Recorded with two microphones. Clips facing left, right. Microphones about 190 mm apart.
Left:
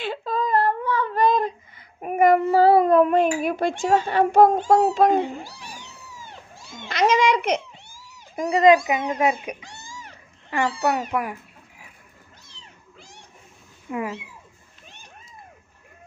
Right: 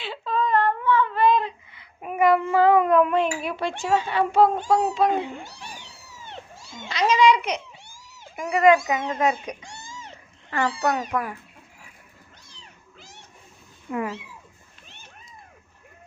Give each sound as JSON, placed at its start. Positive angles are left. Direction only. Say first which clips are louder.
{"t": 0.0, "sound": "a sound", "louder": "left 1 dB", "side_deg": 45}
{"t": 6.9, "sound": "a child's voice", "louder": "even", "side_deg": 45}
{"t": 8.4, "sound": "a child's voice", "louder": "left 2 dB", "side_deg": 25}
{"t": 9.9, "sound": "cat", "louder": "even", "side_deg": -25}
{"t": 10.5, "sound": "a child's voice", "louder": "left 1 dB", "side_deg": 10}
{"t": 13.9, "sound": "a child's voice", "louder": "even", "side_deg": 15}